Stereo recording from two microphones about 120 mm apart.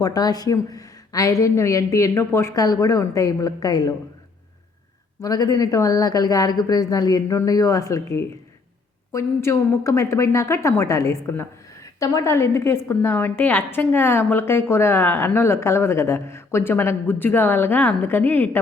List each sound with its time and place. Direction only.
0.0 s a woman's voice: 30° left (ahead or behind)
5.2 s a woman's voice: 30° left (ahead or behind); by 18.6 s 15° left (ahead or behind)